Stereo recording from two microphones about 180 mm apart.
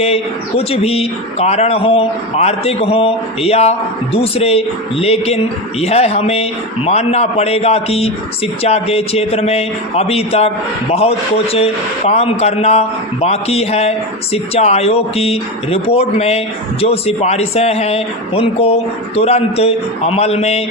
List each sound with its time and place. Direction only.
0.0 s speech: 35° left (ahead or behind)
11.5 s speech: 35° left (ahead or behind)